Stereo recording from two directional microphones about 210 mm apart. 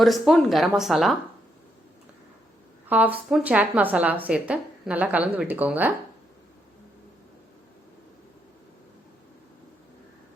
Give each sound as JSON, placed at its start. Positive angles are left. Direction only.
{"t": 0.0, "sound": "speech", "side_deg": 0}
{"t": 2.9, "sound": "a woman's voice", "side_deg": -5}